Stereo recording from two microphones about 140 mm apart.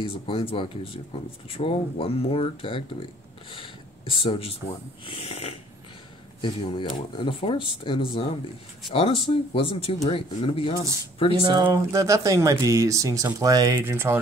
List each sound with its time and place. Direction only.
0.0 s speech: 40° left (ahead or behind)
6.4 s speech: 35° left (ahead or behind)
11.4 s speech: 30° right (ahead or behind)